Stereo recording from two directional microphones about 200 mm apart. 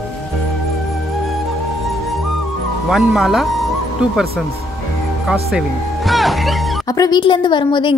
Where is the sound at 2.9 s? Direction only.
Centre (ahead or behind).